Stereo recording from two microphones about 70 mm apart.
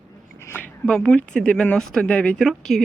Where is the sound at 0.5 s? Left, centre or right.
Left.